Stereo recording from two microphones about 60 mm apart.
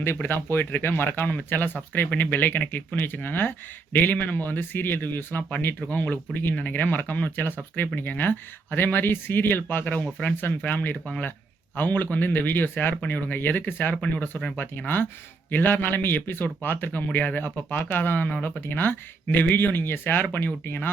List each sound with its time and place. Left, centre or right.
0.0 s a man's voice: left
15.4 s a man's voice: left